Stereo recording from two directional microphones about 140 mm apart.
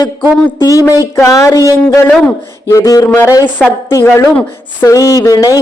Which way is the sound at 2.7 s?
25° left (ahead or behind).